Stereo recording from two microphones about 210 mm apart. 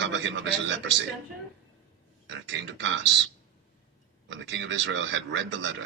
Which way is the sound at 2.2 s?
60° right (ahead or behind).